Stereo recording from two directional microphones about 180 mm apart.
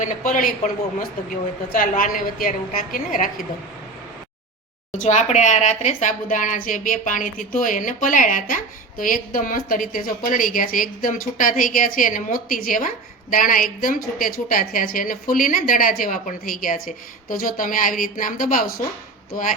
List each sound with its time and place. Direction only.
0.0 s speech: 45° left (ahead or behind)
4.9 s speech: 40° left (ahead or behind)